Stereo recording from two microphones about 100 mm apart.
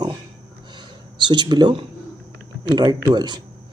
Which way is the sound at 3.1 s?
45° right (ahead or behind).